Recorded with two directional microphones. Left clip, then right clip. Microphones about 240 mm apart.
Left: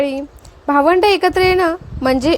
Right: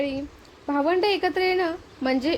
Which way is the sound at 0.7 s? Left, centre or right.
Left.